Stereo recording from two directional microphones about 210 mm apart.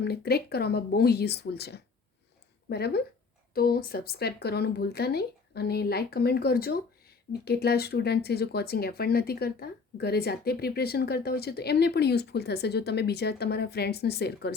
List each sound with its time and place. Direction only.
0.0 s speech: 50° left (ahead or behind)